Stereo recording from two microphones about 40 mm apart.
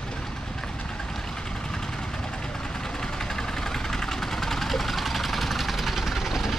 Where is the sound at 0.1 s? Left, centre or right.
Centre.